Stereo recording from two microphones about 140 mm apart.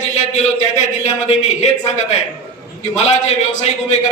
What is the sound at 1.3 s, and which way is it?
A man's voice, 55° left (ahead or behind).